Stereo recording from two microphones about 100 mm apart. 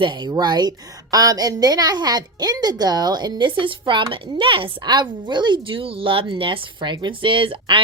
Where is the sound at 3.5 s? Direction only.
55° right (ahead or behind).